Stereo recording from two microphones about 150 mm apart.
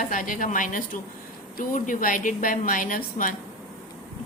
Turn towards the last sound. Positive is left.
turn(degrees=65)  # may be behind; listen again after turning